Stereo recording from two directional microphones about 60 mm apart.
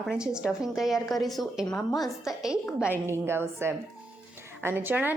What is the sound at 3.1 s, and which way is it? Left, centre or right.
A woman's voice, right.